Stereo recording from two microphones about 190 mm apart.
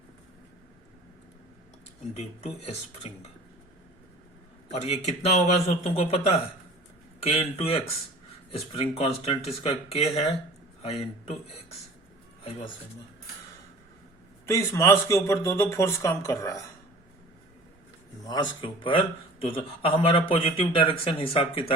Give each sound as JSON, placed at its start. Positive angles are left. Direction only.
{"t": 4.7, "sound": "speech", "side_deg": 35}
{"t": 14.4, "sound": "speech", "side_deg": 15}
{"t": 18.3, "sound": "a man's voice", "side_deg": 25}